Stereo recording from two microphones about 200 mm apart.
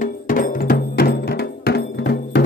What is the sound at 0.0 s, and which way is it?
Music, 45° left (ahead or behind).